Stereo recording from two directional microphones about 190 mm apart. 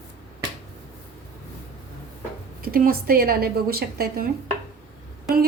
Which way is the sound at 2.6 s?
50° right (ahead or behind).